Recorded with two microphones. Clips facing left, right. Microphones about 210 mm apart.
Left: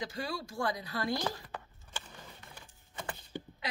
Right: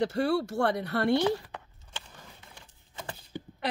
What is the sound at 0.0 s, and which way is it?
Speech, 70° right (ahead or behind).